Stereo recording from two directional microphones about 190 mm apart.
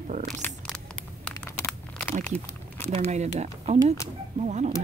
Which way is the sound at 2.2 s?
10° left (ahead or behind).